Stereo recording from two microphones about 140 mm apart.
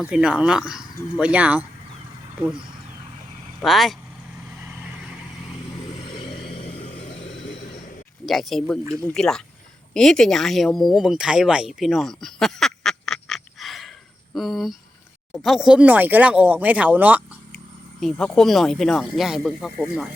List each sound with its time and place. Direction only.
0.0 s speech: 5° right (ahead or behind)
3.6 s speech: centre (ahead or behind)
8.3 s speech: centre (ahead or behind)
18.0 s speech: 5° left (ahead or behind)